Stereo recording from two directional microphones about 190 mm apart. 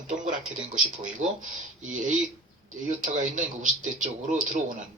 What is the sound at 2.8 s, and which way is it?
Speech, 40° right (ahead or behind).